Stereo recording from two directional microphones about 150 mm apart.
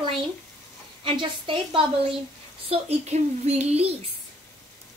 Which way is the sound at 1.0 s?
35° right (ahead or behind).